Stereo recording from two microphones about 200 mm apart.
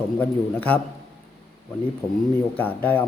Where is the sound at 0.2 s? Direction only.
10° left (ahead or behind).